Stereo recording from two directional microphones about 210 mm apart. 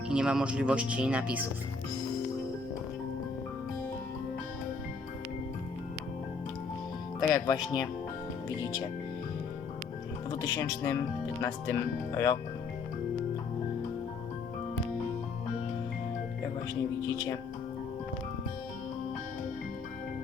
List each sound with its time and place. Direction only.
0.1 s speech: 5° right (ahead or behind)
7.3 s speech: 20° left (ahead or behind)
10.5 s speech: 15° left (ahead or behind)